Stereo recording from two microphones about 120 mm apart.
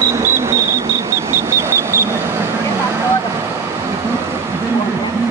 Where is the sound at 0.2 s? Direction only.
20° right (ahead or behind).